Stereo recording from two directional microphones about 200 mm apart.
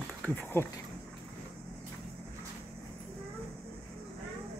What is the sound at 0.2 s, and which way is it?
Speech, 10° left (ahead or behind).